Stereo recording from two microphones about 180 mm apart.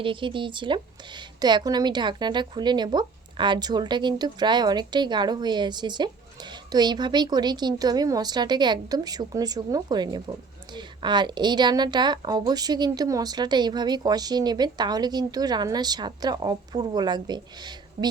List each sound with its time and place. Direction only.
0.0 s a woman's voice: 30° right (ahead or behind)